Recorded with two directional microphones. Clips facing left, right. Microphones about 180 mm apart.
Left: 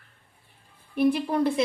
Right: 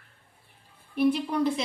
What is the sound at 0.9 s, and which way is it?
Speech, 50° left (ahead or behind).